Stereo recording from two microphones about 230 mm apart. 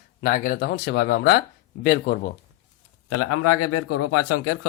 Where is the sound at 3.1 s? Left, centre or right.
Left.